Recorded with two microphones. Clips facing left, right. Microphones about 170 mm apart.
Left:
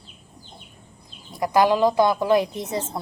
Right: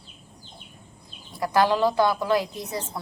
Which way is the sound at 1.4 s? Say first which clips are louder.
Left 3 dB; 15° left (ahead or behind).